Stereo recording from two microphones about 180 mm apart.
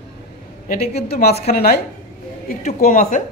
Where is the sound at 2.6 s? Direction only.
45° left (ahead or behind).